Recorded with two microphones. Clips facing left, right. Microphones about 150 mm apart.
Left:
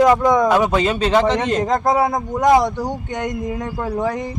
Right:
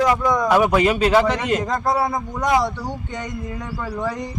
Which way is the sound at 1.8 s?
50° left (ahead or behind).